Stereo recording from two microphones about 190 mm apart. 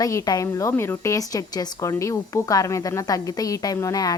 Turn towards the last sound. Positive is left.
turn(degrees=15)  # may be behind; listen again after turning